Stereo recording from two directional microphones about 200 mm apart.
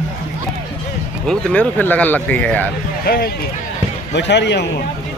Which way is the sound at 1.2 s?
5° left (ahead or behind).